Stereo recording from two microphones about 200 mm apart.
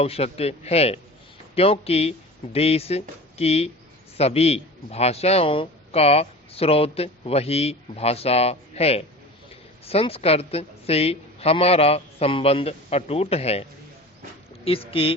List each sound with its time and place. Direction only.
0.0 s a man's voice: 30° left (ahead or behind)